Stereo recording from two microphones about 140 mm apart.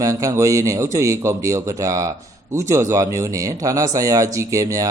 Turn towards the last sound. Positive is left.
turn(degrees=-25)  # may be behind; listen again after turning